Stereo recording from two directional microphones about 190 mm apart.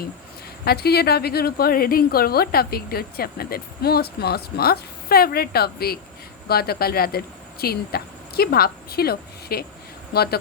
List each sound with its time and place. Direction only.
0.6 s a woman's voice: 55° left (ahead or behind)